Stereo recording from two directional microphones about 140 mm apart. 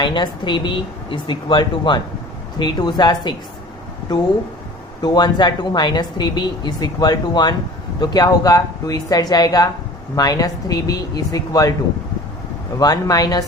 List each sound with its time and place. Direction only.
0.0 s speech: 35° left (ahead or behind)
5.0 s speech: 30° left (ahead or behind)
12.8 s speech: 25° left (ahead or behind)